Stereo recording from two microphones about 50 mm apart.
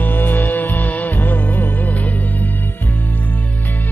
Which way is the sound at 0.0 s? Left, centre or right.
Left.